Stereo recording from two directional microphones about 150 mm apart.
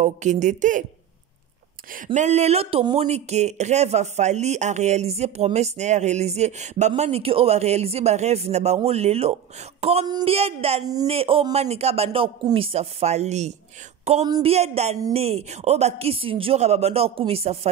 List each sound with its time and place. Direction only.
0.0 s speech: 55° right (ahead or behind)
2.1 s speech: 50° right (ahead or behind)